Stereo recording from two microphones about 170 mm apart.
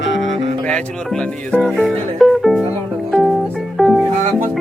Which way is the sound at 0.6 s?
5° left (ahead or behind).